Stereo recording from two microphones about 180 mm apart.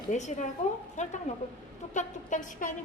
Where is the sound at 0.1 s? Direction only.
40° left (ahead or behind).